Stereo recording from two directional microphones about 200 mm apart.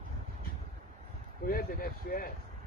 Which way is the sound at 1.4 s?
45° left (ahead or behind).